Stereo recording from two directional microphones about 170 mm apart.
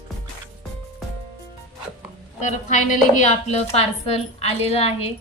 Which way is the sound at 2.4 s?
45° left (ahead or behind).